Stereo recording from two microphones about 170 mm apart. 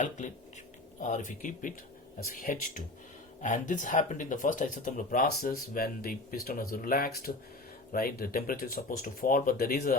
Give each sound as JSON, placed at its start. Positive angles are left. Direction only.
{"t": 0.9, "sound": "speech", "side_deg": 45}